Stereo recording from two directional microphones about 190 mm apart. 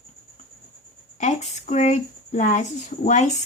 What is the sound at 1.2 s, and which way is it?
Speech, 40° left (ahead or behind).